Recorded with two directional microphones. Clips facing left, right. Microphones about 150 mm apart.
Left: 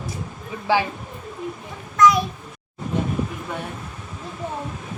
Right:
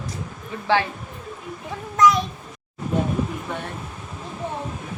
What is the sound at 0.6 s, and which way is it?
Speech, 10° left (ahead or behind).